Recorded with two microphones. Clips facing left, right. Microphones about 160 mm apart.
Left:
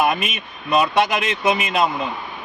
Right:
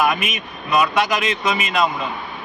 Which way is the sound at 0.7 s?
25° left (ahead or behind).